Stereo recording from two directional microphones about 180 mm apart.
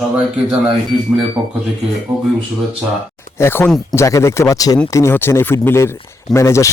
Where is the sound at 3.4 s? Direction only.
10° left (ahead or behind).